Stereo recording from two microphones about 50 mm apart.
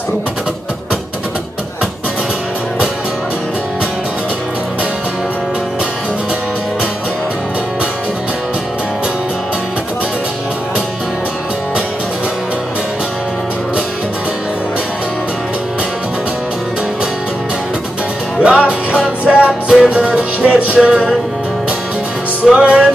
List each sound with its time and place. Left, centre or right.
18.4 s music: right
22.5 s music: right